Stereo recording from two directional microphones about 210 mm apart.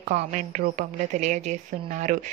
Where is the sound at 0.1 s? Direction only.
35° right (ahead or behind).